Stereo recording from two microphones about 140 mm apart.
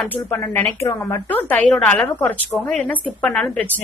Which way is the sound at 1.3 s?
10° left (ahead or behind).